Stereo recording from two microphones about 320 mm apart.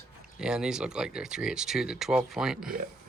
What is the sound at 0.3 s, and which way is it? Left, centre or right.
Speech, centre.